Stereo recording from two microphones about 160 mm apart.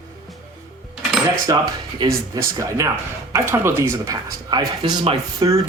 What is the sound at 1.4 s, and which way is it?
Speech, 25° right (ahead or behind).